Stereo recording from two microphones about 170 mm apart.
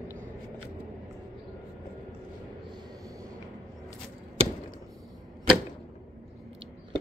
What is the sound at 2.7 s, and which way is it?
Train, 20° right (ahead or behind).